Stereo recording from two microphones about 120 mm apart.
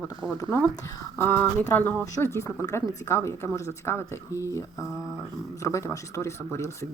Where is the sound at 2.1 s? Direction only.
25° left (ahead or behind).